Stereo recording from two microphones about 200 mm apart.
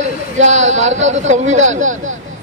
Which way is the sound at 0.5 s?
35° right (ahead or behind).